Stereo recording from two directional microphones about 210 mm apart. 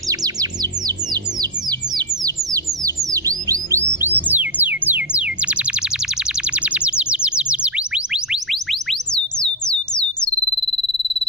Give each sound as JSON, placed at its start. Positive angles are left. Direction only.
{"t": 0.1, "sound": "music", "side_deg": -20}
{"t": 6.5, "sound": "chirp tone", "side_deg": -5}